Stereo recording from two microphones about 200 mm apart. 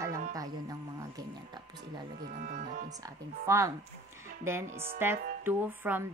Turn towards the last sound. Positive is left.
turn(degrees=-10)  # may be behind; listen again after turning